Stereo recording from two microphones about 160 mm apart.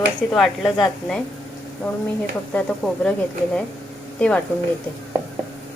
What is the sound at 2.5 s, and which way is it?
Speech, 5° left (ahead or behind).